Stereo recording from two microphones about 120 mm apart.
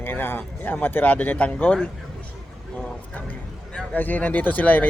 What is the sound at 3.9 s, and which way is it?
Speech, 15° left (ahead or behind).